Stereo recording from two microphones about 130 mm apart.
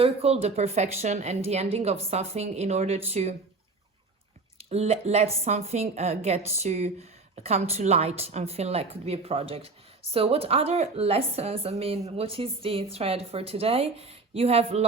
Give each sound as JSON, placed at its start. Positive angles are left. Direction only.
{"t": 0.0, "sound": "a woman's voice", "side_deg": -50}
{"t": 4.5, "sound": "a woman's voice", "side_deg": -55}